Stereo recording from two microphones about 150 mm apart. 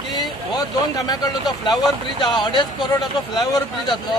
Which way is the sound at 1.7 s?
Centre (ahead or behind).